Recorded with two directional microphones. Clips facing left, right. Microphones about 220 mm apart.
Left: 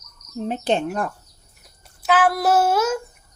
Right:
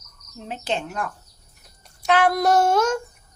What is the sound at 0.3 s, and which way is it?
Speech, 40° left (ahead or behind).